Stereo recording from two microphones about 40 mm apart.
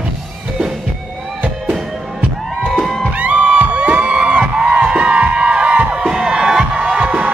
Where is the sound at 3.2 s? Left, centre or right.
Right.